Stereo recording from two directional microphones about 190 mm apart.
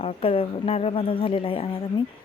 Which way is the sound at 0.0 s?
30° left (ahead or behind).